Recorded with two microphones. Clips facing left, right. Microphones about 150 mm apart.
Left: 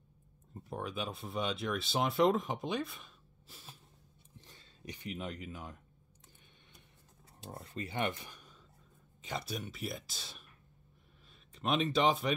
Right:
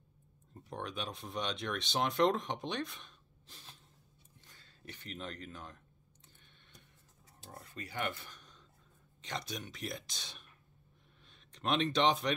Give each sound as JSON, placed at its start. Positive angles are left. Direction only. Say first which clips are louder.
{"t": 0.7, "sound": "speech", "louder": "left 2 dB", "side_deg": 5}
{"t": 4.4, "sound": "speech", "louder": "left 5 dB", "side_deg": 20}
{"t": 7.5, "sound": "speech", "louder": "left 3 dB", "side_deg": 30}
{"t": 11.5, "sound": "speech", "louder": "left 1 dB", "side_deg": 5}